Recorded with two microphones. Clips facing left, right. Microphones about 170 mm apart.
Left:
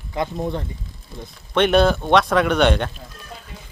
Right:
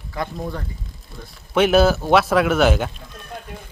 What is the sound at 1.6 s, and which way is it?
Speech, 5° right (ahead or behind).